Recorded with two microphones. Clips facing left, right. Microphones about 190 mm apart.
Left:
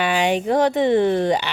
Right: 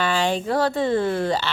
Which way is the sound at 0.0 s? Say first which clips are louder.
Left 3 dB; 15° left (ahead or behind).